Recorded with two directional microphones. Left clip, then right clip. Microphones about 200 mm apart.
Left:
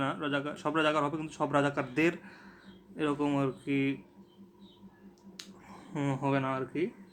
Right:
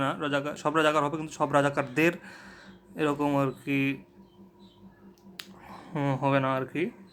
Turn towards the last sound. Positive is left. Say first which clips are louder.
# right 4 dB
turn(degrees=-20)  # may be behind; listen again after turning